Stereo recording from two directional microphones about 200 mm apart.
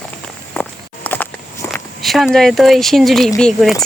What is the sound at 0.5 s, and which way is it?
Walk, 5° left (ahead or behind).